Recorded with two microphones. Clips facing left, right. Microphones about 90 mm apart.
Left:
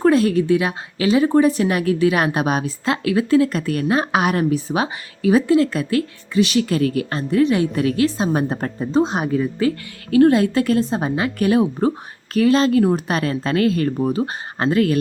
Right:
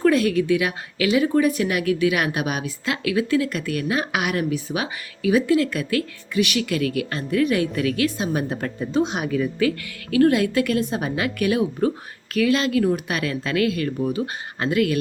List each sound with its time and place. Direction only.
0.0 s a woman's voice: 35° left (ahead or behind)